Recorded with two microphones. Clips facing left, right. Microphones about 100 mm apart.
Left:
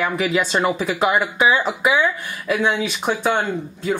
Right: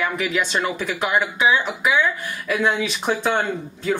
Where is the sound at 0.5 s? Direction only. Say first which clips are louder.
Left 4 dB; 25° left (ahead or behind).